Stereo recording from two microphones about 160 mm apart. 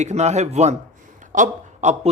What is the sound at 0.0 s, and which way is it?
A man's voice, 45° right (ahead or behind).